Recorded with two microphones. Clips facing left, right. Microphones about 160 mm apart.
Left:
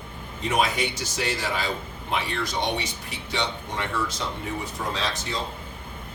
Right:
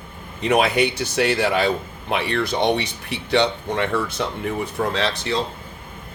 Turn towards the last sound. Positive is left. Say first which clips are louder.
# right 7 dB
turn(degrees=-70)  # may be behind; listen again after turning